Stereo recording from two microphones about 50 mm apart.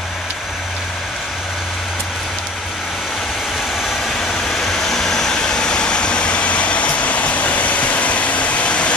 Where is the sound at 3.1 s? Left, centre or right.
Centre; by 8.9 s left.